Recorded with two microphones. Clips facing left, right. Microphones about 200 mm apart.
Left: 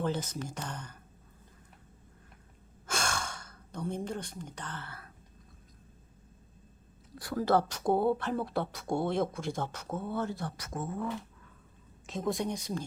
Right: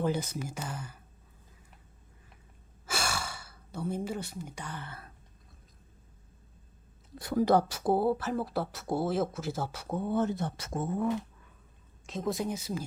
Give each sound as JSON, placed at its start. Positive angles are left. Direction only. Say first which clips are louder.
{"t": 0.0, "sound": "speech", "louder": "right 2 dB", "side_deg": -10}
{"t": 2.8, "sound": "gasp", "louder": "even", "side_deg": -5}
{"t": 7.2, "sound": "speech", "louder": "right 3 dB", "side_deg": -20}
{"t": 12.0, "sound": "speech", "louder": "even", "side_deg": 0}